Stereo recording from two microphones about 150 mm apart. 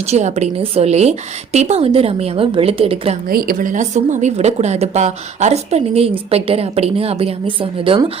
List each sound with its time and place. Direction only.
0.0 s a woman's voice: 45° right (ahead or behind)
3.2 s speech: 80° right; by 8.1 s 35° right (ahead or behind)